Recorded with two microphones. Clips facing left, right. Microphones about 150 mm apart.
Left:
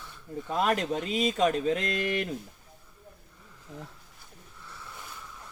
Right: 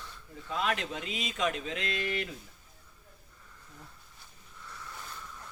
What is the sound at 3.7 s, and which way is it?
Speech, 90° left.